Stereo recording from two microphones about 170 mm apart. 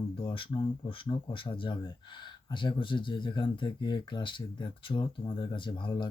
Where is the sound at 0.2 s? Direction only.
30° left (ahead or behind).